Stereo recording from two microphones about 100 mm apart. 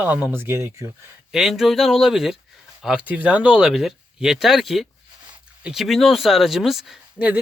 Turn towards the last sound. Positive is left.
turn(degrees=0)  # may be behind; listen again after turning